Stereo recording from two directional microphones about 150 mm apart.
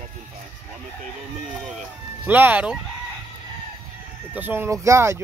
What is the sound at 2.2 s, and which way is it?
Speech, 10° right (ahead or behind).